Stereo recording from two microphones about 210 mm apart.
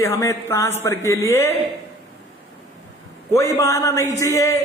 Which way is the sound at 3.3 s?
15° left (ahead or behind).